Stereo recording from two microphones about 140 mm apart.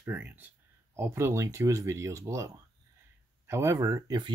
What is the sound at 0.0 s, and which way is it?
Speech, 15° right (ahead or behind).